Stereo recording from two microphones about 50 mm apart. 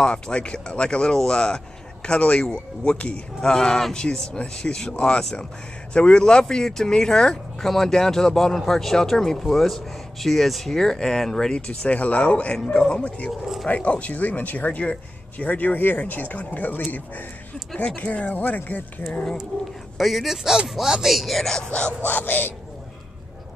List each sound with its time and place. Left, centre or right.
0.0 s speech: left
2.0 s speech: left
2.4 s speech: centre
11.6 s speech: left
20.0 s speech: centre
21.6 s speech: left
22.0 s speech: left